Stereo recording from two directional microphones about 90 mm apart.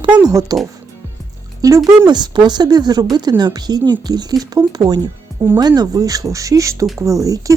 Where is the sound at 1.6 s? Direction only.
35° right (ahead or behind).